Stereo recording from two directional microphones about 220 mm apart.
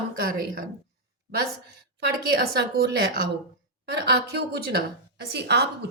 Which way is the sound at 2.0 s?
45° right (ahead or behind).